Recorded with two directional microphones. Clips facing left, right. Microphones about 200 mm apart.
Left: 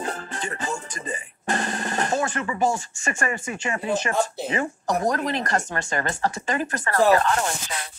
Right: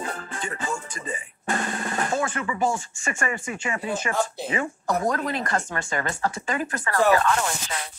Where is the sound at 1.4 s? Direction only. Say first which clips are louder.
Left 1 dB; 35° left (ahead or behind).